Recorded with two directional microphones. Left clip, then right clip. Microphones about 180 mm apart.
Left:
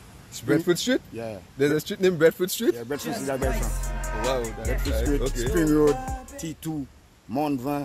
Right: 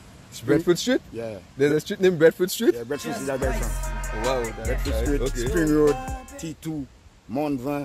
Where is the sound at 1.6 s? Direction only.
25° right (ahead or behind).